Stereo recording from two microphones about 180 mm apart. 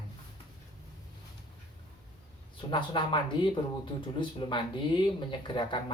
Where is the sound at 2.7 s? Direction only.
25° left (ahead or behind).